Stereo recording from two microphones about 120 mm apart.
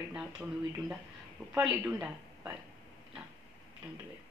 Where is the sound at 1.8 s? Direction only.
15° right (ahead or behind).